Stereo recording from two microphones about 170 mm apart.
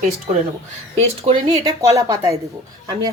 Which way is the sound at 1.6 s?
20° right (ahead or behind).